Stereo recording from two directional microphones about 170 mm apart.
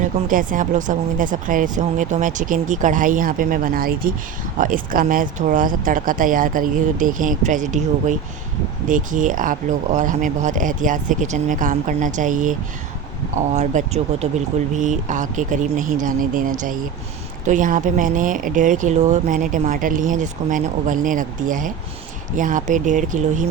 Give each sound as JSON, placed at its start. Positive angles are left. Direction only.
{"t": 0.0, "sound": "speech", "side_deg": -55}